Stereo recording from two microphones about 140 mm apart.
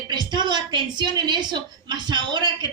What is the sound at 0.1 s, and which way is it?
A woman's voice, 30° right (ahead or behind).